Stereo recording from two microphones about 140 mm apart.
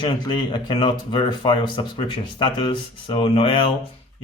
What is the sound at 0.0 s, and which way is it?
Speech, 35° left (ahead or behind).